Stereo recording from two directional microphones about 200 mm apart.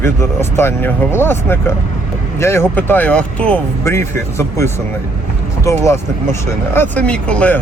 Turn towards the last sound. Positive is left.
turn(degrees=5)  # may be behind; listen again after turning